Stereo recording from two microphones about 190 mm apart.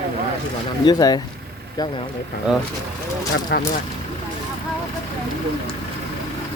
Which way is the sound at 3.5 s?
60° left (ahead or behind).